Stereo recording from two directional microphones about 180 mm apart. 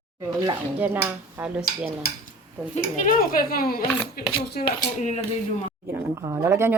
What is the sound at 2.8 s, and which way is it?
Speech, 50° left (ahead or behind).